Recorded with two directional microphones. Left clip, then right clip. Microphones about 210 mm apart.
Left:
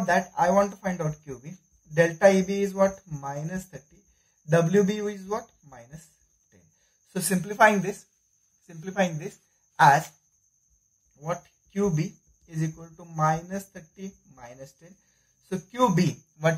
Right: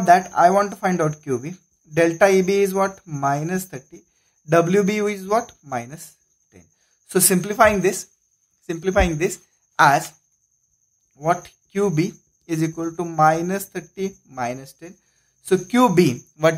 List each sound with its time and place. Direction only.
0.0 s speech: 45° right (ahead or behind)
7.1 s a woman's voice: 45° right (ahead or behind)
11.1 s speech: 50° right (ahead or behind)